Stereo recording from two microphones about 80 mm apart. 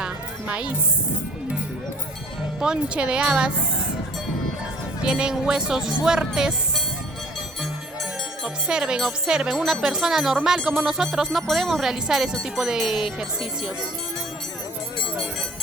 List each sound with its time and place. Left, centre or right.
0.0 s music: centre
2.6 s speech: centre
5.0 s speech: centre
8.4 s speech: centre